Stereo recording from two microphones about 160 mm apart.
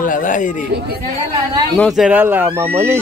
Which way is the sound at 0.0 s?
55° left (ahead or behind).